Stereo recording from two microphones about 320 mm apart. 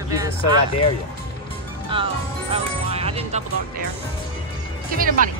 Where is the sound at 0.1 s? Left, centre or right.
Centre.